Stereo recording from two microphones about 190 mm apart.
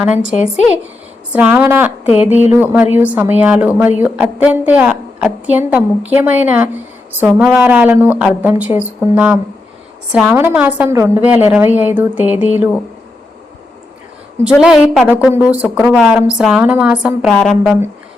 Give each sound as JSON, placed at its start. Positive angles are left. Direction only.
{"t": 1.3, "sound": "a woman's voice", "side_deg": -5}
{"t": 2.0, "sound": "speech", "side_deg": 35}
{"t": 2.3, "sound": "a woman's voice", "side_deg": -10}
{"t": 14.4, "sound": "a woman's voice", "side_deg": -5}